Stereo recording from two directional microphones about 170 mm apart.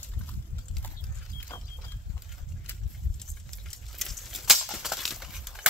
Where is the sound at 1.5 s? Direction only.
15° left (ahead or behind).